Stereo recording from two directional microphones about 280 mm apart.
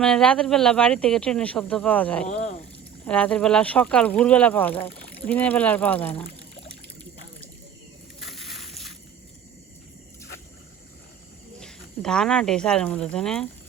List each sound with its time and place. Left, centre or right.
0.0 s speech: centre
2.2 s speech: left
3.1 s speech: centre
8.2 s a sound: centre
11.6 s speech: centre